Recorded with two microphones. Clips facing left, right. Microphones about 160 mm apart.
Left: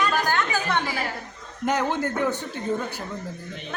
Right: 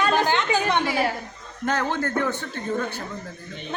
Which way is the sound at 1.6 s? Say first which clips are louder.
Left 1 dB; 15° left (ahead or behind).